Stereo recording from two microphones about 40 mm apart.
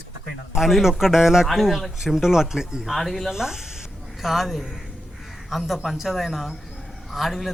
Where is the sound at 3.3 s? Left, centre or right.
Centre.